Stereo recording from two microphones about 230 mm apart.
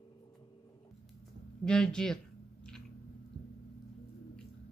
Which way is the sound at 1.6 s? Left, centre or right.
Centre.